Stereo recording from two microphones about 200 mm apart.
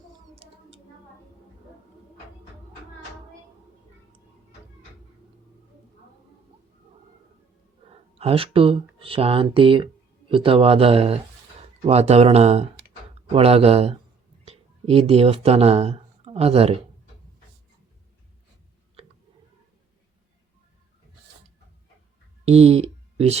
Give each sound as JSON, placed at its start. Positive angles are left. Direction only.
{"t": 7.9, "sound": "speech", "side_deg": -30}
{"t": 22.4, "sound": "speech", "side_deg": -30}